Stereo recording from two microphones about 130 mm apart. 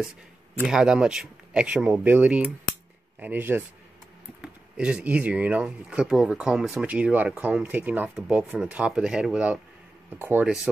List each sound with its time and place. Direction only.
0.7 s speech: 5° right (ahead or behind)